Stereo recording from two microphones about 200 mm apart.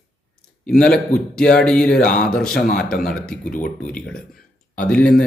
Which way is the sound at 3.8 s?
5° left (ahead or behind).